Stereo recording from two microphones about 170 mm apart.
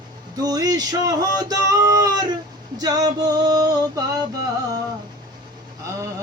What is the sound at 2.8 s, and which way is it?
Music, 20° right (ahead or behind).